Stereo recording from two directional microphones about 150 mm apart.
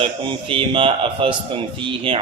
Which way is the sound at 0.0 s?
35° right (ahead or behind).